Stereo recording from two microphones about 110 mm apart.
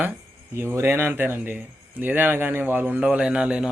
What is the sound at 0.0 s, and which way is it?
Speech, 15° right (ahead or behind).